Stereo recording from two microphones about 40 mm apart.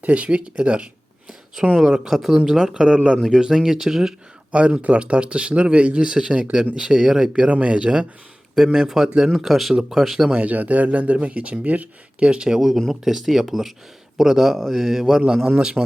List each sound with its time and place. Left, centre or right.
0.0 s speech: right
1.8 s speech: centre
2.3 s a man's voice: centre
2.7 s speech: right
3.4 s a man's voice: centre
4.5 s speech: right
7.4 s speech: right
7.8 s a man's voice: right
9.5 s speech: centre
10.4 s speech: right
12.2 s speech: right
12.5 s a man's voice: centre; by 15.8 s right